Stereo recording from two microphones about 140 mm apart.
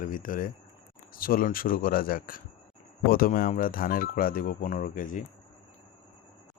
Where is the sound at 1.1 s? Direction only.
90° left; by 5.3 s 70° left (ahead or behind).